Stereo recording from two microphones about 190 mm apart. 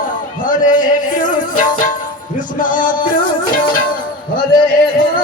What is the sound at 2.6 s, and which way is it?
Music, 45° left (ahead or behind).